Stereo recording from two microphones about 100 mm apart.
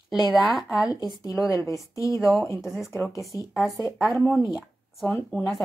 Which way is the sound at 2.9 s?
25° left (ahead or behind).